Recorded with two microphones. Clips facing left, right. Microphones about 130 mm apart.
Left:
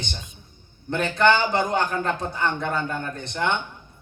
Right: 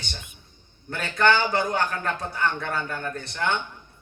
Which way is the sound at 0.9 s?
20° left (ahead or behind).